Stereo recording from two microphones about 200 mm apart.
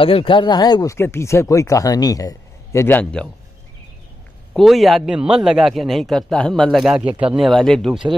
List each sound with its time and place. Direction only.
0.0 s speech: 25° left (ahead or behind); by 3.3 s 5° left (ahead or behind)
4.6 s a man's voice: centre (ahead or behind)